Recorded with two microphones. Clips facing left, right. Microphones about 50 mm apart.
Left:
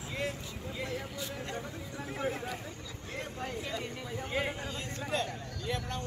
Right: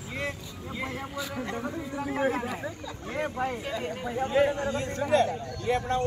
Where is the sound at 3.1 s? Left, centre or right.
Right.